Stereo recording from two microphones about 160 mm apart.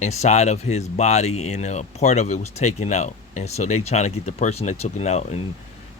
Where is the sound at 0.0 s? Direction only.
45° left (ahead or behind).